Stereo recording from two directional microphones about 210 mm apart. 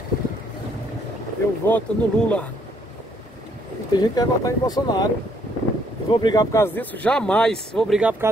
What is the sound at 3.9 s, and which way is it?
Speech, 15° left (ahead or behind).